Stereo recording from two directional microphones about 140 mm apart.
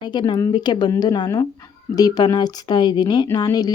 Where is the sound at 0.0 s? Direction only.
30° left (ahead or behind).